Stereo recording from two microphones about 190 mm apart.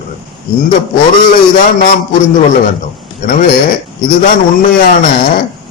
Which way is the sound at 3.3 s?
45° left (ahead or behind).